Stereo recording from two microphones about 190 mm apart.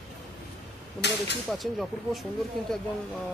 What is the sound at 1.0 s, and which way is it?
Speech, 65° left (ahead or behind).